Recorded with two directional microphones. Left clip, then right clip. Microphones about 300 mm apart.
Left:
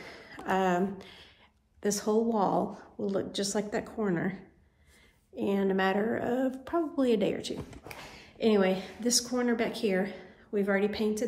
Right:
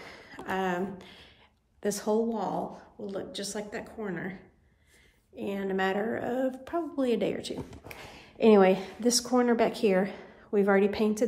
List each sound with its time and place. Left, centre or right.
0.0 s a sound: centre
1.8 s a woman's voice: centre
2.2 s a woman's voice: centre
5.3 s a woman's voice: centre
8.2 s a woman's voice: right